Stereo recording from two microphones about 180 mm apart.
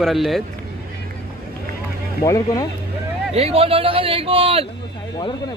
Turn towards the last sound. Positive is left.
turn(degrees=-30)  # may be behind; listen again after turning